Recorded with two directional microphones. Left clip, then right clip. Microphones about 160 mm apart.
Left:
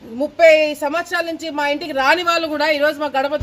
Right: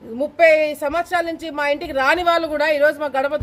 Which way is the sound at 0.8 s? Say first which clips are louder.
Even; 20° right (ahead or behind).